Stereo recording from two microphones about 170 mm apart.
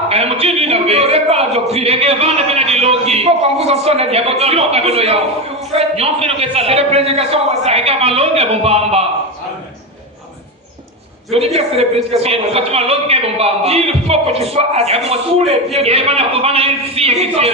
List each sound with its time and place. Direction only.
0.1 s a sound: 35° right (ahead or behind)
5.7 s a woman's voice: 35° right (ahead or behind)
11.3 s a woman's voice: 35° right (ahead or behind)